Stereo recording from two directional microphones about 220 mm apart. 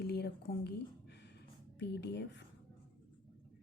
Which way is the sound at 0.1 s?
45° left (ahead or behind).